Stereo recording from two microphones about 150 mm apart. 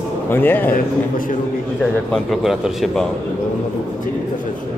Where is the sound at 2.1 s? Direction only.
Centre (ahead or behind).